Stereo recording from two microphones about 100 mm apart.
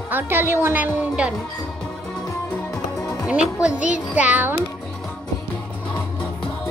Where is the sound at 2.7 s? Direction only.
35° left (ahead or behind).